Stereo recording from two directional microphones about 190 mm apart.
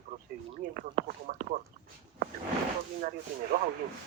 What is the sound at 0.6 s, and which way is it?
Speech, 50° right (ahead or behind).